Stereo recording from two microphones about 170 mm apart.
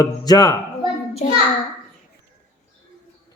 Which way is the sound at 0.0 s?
20° left (ahead or behind).